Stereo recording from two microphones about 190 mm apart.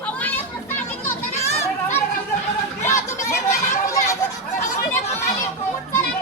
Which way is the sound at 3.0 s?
40° left (ahead or behind).